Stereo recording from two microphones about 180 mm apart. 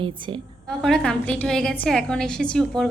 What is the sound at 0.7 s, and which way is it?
A woman's voice, 5° left (ahead or behind).